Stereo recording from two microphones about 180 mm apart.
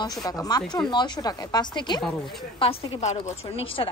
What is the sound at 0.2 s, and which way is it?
A woman's voice, 20° left (ahead or behind).